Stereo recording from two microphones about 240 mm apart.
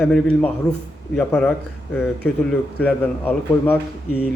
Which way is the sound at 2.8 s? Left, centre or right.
Centre.